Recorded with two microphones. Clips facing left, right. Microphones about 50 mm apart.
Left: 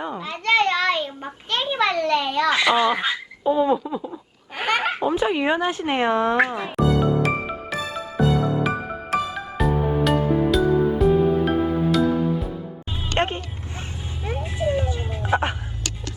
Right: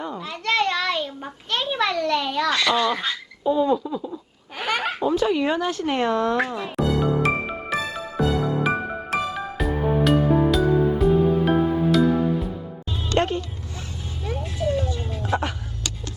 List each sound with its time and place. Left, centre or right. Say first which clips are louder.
0.2 s a sound: left 3 dB; centre
2.5 s speech: left 3 dB; centre
4.5 s baby laughter: left 3 dB; centre
4.9 s speech: even; left
6.7 s music: left 2 dB; centre
13.1 s a sound: right 1 dB; left
14.3 s music: left 1 dB; left